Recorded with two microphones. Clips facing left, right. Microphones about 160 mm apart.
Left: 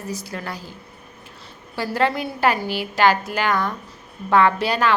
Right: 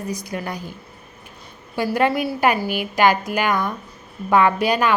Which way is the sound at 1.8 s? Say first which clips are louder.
Right 2 dB; 15° right (ahead or behind).